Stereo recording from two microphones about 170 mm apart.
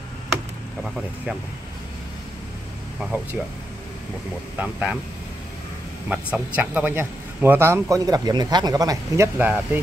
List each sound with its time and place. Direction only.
3.0 s speech: 10° right (ahead or behind)
4.6 s speech: 10° right (ahead or behind)
6.0 s speech: 10° right (ahead or behind)